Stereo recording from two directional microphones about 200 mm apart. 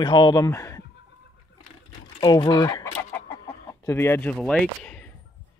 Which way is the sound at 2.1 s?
25° left (ahead or behind).